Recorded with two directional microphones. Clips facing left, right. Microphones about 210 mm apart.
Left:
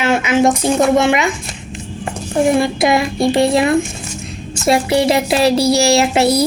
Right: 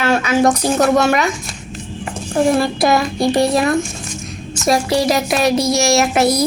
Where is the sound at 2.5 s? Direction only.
20° left (ahead or behind).